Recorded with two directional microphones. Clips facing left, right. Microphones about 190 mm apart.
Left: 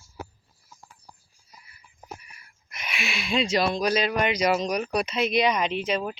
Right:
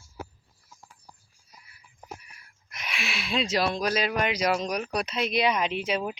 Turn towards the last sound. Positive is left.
turn(degrees=-10)  # may be behind; listen again after turning